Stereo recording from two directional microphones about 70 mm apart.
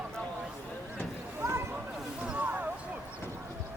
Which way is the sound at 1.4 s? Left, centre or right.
Right.